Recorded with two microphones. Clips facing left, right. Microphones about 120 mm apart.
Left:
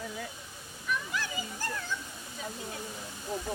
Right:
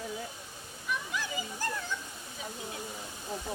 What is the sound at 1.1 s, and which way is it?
Dog, 15° right (ahead or behind).